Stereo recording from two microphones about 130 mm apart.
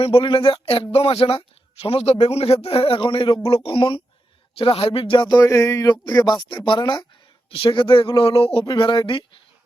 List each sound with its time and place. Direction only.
0.0 s speech: 45° left (ahead or behind)
5.4 s speech: 25° left (ahead or behind); by 9.4 s 40° left (ahead or behind)